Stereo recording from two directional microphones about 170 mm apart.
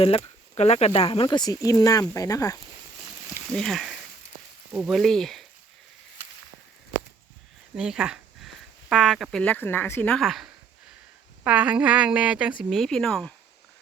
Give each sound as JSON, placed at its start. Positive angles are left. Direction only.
{"t": 0.5, "sound": "speech", "side_deg": 40}
{"t": 3.5, "sound": "speech", "side_deg": 5}
{"t": 7.8, "sound": "speech", "side_deg": -5}